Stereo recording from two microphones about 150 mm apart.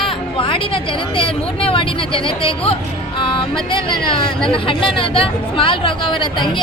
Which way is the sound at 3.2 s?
35° left (ahead or behind).